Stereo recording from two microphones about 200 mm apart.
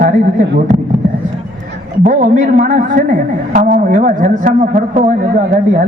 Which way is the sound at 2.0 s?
40° right (ahead or behind).